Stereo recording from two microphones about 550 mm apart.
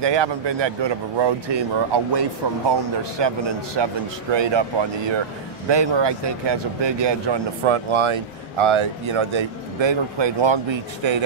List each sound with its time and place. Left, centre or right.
0.0 s speech: right